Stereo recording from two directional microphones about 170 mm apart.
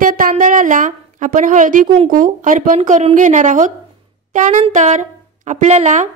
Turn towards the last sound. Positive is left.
turn(degrees=-45)  # may be behind; listen again after turning